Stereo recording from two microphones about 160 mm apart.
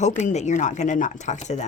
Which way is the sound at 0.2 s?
45° left (ahead or behind).